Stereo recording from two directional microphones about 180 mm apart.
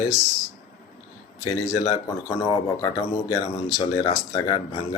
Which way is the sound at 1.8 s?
20° left (ahead or behind).